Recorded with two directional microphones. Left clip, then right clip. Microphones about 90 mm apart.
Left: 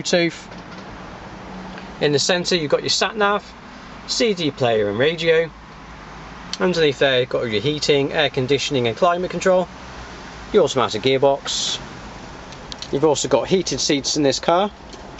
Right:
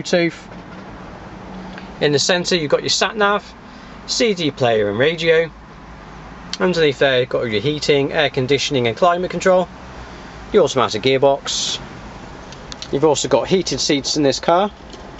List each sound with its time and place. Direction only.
0.0 s speech: 5° right (ahead or behind)
2.0 s speech: 5° right (ahead or behind)
6.5 s speech: 5° right (ahead or behind)
12.9 s speech: 5° right (ahead or behind)